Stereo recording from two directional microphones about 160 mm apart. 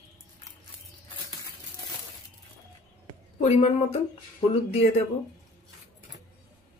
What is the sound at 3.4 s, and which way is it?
Speech, 45° left (ahead or behind).